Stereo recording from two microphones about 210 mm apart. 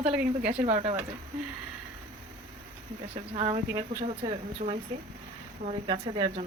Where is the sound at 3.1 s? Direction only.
30° right (ahead or behind).